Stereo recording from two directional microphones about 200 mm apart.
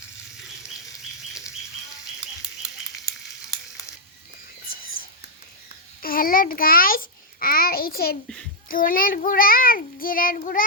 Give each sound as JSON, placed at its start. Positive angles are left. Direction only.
{"t": 6.0, "sound": "babbling", "side_deg": 45}
{"t": 8.7, "sound": "a child's voice", "side_deg": 45}